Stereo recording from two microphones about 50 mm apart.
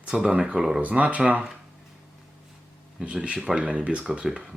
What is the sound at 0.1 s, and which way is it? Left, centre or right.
Speech, centre.